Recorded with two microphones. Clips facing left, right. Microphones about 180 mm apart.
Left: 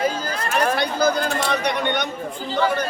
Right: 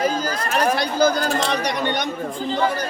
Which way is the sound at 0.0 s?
40° right (ahead or behind).